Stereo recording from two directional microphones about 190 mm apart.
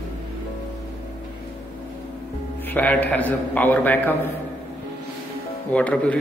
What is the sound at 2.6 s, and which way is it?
A man's voice, 10° left (ahead or behind).